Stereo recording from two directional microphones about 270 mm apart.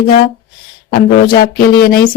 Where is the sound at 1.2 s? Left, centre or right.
Left.